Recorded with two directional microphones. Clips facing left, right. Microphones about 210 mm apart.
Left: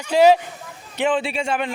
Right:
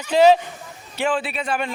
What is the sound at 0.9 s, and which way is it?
Speech, 20° left (ahead or behind).